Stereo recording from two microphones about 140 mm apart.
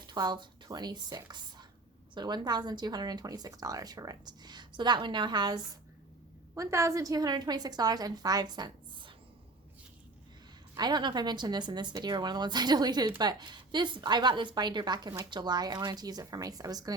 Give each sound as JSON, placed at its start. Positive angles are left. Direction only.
{"t": 0.1, "sound": "a woman's voice", "side_deg": -30}
{"t": 6.5, "sound": "a woman's voice", "side_deg": -20}
{"t": 10.8, "sound": "a woman's voice", "side_deg": -30}